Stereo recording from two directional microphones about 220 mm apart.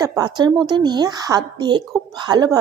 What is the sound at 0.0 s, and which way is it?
Speech, 15° right (ahead or behind).